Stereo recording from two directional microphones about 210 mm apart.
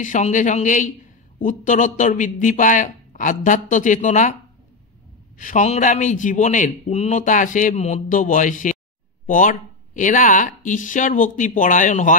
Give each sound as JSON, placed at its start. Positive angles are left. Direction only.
{"t": 0.0, "sound": "a man's voice", "side_deg": 35}
{"t": 5.4, "sound": "a man's voice", "side_deg": 35}